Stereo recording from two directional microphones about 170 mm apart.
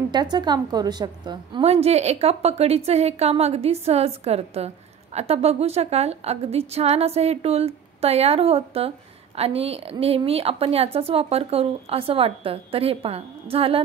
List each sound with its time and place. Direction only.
0.1 s a woman's voice: 25° right (ahead or behind)